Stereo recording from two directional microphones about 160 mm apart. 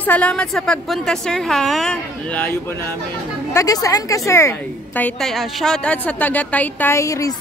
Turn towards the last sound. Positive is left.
turn(degrees=20)  # may be behind; listen again after turning